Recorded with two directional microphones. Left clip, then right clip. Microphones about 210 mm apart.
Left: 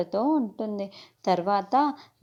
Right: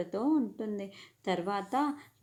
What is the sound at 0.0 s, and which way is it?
A woman's voice, 25° left (ahead or behind).